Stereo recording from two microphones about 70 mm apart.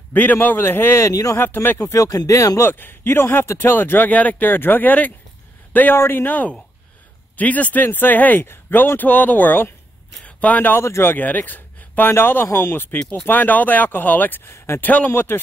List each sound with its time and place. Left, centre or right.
0.1 s speech: left
1.0 s speech: left
1.4 s speech: left
1.8 s speech: left
2.0 s speech: left
2.6 s a man's voice: left
10.8 s speech: left
14.9 s speech: left